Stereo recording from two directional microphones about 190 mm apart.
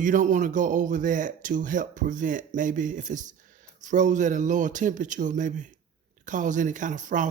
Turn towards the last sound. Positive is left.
turn(degrees=-40)  # may be behind; listen again after turning